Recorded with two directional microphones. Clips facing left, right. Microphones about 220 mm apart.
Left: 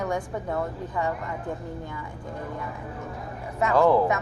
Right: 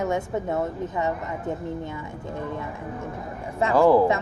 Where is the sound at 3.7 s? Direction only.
5° right (ahead or behind).